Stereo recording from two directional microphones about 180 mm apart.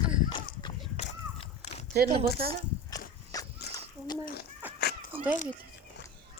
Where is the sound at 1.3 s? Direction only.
40° left (ahead or behind).